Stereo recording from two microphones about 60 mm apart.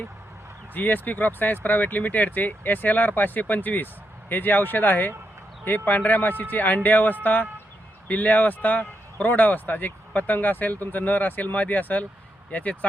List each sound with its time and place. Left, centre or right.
0.7 s speech: left